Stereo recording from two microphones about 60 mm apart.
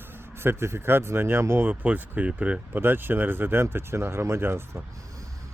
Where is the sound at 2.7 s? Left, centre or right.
Right.